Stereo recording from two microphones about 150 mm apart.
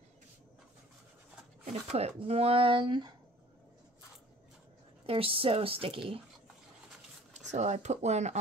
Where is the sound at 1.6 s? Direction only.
45° right (ahead or behind).